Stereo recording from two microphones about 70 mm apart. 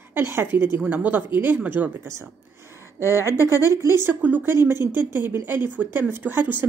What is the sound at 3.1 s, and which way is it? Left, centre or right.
Speech, right.